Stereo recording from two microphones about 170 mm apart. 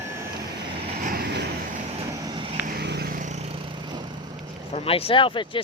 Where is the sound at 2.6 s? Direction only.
65° right (ahead or behind); by 4.1 s 25° right (ahead or behind).